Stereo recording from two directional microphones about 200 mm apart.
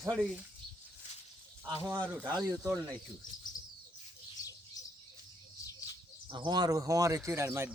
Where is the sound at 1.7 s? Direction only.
10° right (ahead or behind).